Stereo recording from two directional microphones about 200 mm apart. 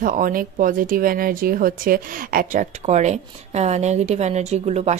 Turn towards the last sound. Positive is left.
turn(degrees=-35)  # may be behind; listen again after turning